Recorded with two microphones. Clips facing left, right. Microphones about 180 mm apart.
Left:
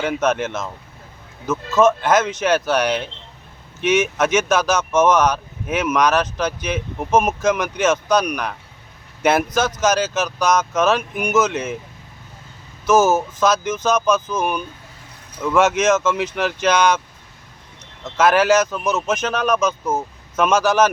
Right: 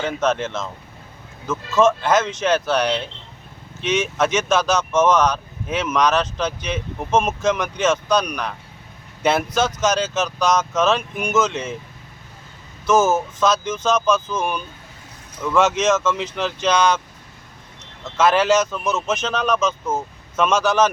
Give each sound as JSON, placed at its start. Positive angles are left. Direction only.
{"t": 0.0, "sound": "speech", "side_deg": 10}
{"t": 1.5, "sound": "speech", "side_deg": 5}
{"t": 4.8, "sound": "speech", "side_deg": 20}
{"t": 5.1, "sound": "speech", "side_deg": 5}
{"t": 12.9, "sound": "speech", "side_deg": 0}
{"t": 18.2, "sound": "speech", "side_deg": 0}
{"t": 18.9, "sound": "speech", "side_deg": 15}
{"t": 20.3, "sound": "speech", "side_deg": 0}